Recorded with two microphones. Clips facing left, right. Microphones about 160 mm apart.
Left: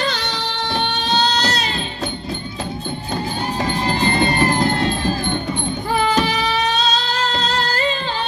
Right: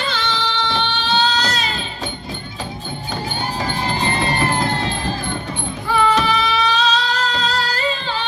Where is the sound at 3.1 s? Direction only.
35° left (ahead or behind).